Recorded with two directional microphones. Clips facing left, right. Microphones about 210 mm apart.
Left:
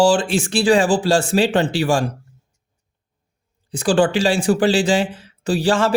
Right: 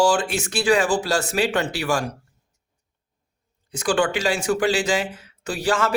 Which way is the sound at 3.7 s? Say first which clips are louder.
Left 5 dB; 30° left (ahead or behind).